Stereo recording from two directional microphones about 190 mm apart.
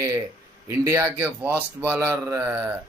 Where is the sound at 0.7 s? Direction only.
15° right (ahead or behind).